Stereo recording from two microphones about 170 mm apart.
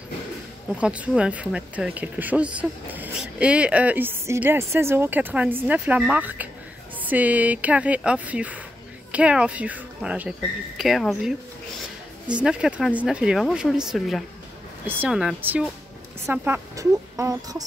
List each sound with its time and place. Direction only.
0.7 s speech: 10° right (ahead or behind)